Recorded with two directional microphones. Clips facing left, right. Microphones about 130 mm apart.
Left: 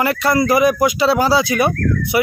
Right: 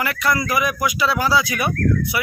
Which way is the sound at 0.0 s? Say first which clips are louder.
Left 6 dB; 30° left (ahead or behind).